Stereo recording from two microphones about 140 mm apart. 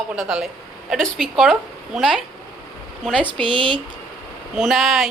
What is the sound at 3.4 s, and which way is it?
Speech, 35° right (ahead or behind).